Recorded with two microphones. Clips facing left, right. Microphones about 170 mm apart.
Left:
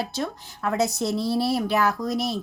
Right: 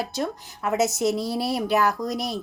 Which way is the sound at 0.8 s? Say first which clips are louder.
Right 2 dB; 20° right (ahead or behind).